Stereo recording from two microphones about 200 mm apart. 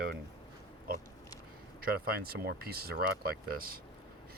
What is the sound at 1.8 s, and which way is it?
Speech, 50° right (ahead or behind).